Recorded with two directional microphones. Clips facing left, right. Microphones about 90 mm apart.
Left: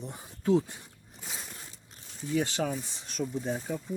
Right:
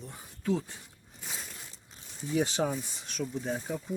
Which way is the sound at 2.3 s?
15° right (ahead or behind).